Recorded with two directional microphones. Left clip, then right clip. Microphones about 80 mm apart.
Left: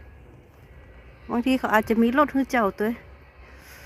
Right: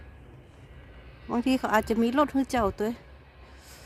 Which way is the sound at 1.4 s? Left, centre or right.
Centre.